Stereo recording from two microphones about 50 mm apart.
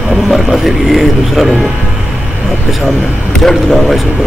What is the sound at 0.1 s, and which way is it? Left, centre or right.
Speech, centre.